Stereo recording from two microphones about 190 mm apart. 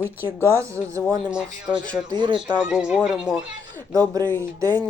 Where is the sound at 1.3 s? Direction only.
5° right (ahead or behind).